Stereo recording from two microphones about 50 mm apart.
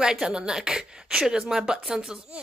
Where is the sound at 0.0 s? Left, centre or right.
Centre.